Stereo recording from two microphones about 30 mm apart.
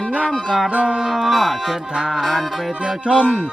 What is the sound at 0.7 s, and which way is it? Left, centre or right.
Music, right.